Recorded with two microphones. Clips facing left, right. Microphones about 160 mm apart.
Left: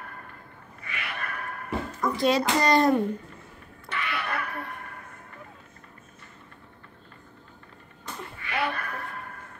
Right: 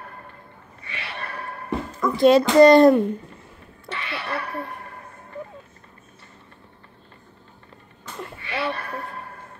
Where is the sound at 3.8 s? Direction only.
30° right (ahead or behind).